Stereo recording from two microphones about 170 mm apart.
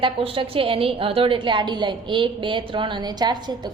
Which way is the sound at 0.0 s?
30° right (ahead or behind).